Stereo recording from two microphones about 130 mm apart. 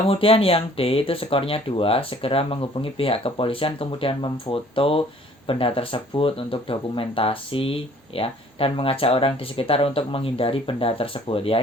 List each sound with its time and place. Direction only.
0.1 s speech: 45° left (ahead or behind)